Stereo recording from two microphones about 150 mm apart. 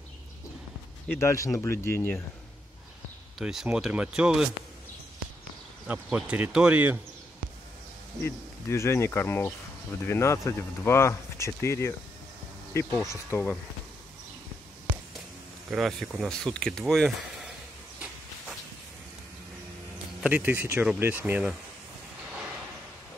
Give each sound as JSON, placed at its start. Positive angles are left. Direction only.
{"t": 1.0, "sound": "speech", "side_deg": 15}
{"t": 3.3, "sound": "speech", "side_deg": -5}
{"t": 5.9, "sound": "speech", "side_deg": -5}
{"t": 8.2, "sound": "speech", "side_deg": 15}
{"t": 15.7, "sound": "speech", "side_deg": 0}
{"t": 20.2, "sound": "speech", "side_deg": -10}